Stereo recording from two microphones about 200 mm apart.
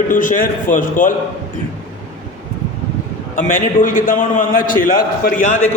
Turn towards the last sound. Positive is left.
turn(degrees=40)  # may be behind; listen again after turning